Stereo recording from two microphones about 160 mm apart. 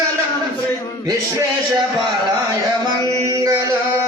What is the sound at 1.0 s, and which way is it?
Speech, 25° right (ahead or behind).